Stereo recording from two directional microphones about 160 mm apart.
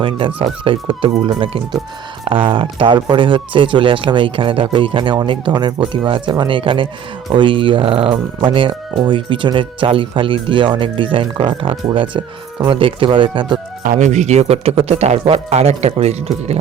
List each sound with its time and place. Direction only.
0.0 s speech: 35° right (ahead or behind)
13.8 s speech: 50° right (ahead or behind)